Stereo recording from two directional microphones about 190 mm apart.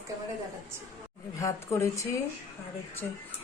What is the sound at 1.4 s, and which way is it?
Speech, 15° left (ahead or behind).